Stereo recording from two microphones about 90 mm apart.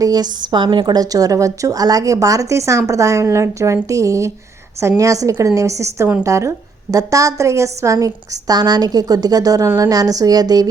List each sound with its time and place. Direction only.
0.0 s a woman's voice: 45° right (ahead or behind)